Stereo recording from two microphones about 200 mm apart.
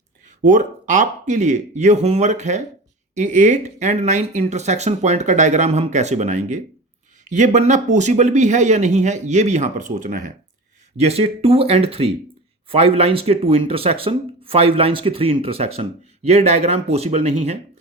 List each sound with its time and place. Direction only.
0.4 s speech: 40° right (ahead or behind)
10.9 s speech: 30° right (ahead or behind)